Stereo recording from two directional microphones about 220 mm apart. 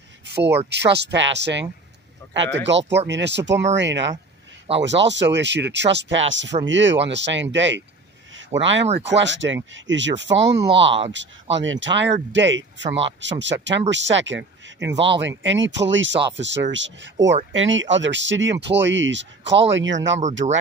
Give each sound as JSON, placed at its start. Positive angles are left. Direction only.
{"t": 0.3, "sound": "speech", "side_deg": -50}
{"t": 10.6, "sound": "speech", "side_deg": -25}
{"t": 11.5, "sound": "speech", "side_deg": -60}
{"t": 20.4, "sound": "speech", "side_deg": -35}